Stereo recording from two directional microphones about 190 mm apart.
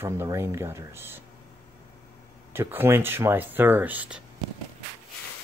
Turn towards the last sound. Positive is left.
turn(degrees=-10)  # may be behind; listen again after turning